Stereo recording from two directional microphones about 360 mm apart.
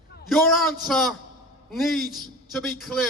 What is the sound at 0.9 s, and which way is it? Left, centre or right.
A man's voice, centre.